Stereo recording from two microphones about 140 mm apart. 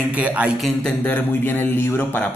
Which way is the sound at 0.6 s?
5° left (ahead or behind).